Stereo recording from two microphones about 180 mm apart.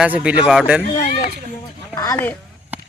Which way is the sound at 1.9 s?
20° left (ahead or behind).